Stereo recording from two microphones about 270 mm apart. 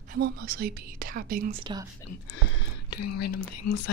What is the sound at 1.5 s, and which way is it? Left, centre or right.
Speech, centre.